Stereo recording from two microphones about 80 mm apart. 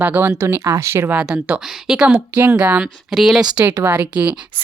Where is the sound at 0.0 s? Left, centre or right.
Right.